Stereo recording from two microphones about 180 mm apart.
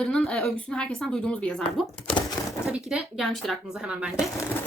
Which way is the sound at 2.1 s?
25° left (ahead or behind).